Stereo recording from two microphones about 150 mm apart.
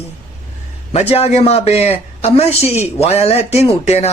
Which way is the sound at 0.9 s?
45° left (ahead or behind).